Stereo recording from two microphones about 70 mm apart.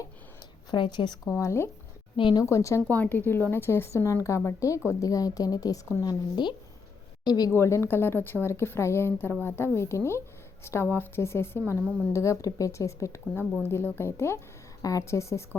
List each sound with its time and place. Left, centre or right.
0.7 s a woman's voice: left
1.3 s a woman's voice: left
2.9 s a woman's voice: left
4.9 s a woman's voice: left
7.5 s a woman's voice: left
9.7 s a woman's voice: left
12.1 s a woman's voice: left
13.6 s a woman's voice: left
14.8 s a woman's voice: left